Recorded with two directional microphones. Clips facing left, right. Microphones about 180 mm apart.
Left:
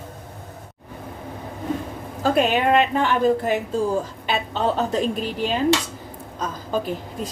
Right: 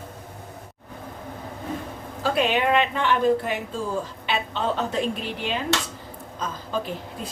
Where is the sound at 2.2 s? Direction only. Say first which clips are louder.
Left 3 dB; 45° left (ahead or behind).